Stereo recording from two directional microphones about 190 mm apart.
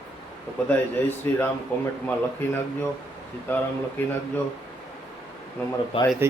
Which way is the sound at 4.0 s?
10° left (ahead or behind).